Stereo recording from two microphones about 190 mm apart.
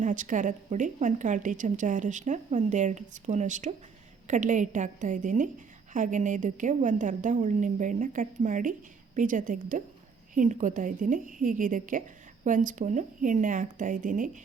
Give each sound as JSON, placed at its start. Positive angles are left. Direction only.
{"t": 0.0, "sound": "a woman's voice", "side_deg": -40}